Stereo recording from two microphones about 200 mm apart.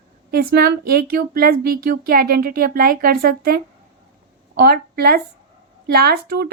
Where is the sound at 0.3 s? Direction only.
50° right (ahead or behind).